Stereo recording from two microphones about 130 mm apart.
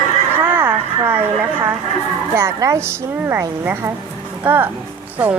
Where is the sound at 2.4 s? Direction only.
20° right (ahead or behind).